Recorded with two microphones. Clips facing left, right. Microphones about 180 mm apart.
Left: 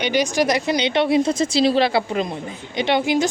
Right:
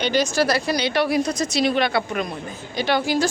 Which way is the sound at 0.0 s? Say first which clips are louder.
Left 1 dB; 15° left (ahead or behind).